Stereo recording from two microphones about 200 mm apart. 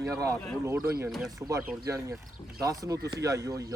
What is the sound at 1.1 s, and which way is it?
Speech, centre (ahead or behind).